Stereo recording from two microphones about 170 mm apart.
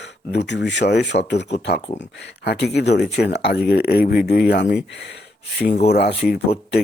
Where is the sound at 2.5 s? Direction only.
80° left.